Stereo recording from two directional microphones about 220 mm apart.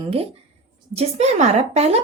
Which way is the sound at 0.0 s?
25° right (ahead or behind).